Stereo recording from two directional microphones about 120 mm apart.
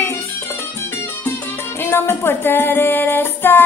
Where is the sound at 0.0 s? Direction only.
20° left (ahead or behind).